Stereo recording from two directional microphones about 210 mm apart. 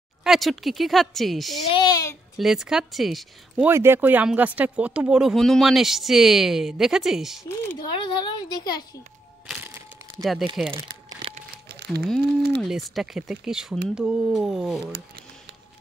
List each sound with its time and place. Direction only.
0.2 s speech: centre (ahead or behind)
1.7 s a child's voice: 20° left (ahead or behind)
2.3 s speech: centre (ahead or behind)
3.7 s speech: 10° right (ahead or behind)
8.0 s a child's voice: 20° left (ahead or behind)
9.5 s crumpling: centre (ahead or behind)
10.7 s crumpling: 20° right (ahead or behind)
12.0 s speech: centre (ahead or behind)